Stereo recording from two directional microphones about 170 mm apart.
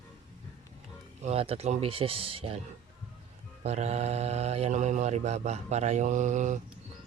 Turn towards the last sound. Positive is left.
turn(degrees=-45)  # may be behind; listen again after turning